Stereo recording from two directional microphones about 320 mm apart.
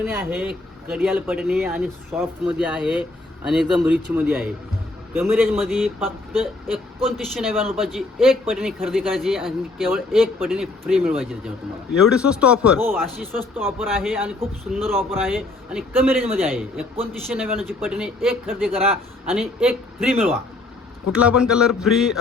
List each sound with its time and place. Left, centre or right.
0.0 s speech: centre